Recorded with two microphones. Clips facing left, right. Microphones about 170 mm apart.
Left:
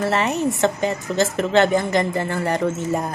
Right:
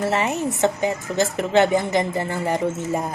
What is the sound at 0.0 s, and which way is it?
A woman's voice, 15° right (ahead or behind).